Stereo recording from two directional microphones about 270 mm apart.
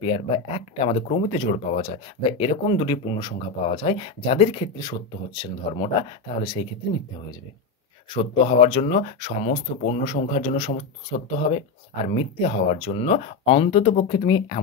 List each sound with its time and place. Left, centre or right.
0.0 s speech: left
8.1 s speech: left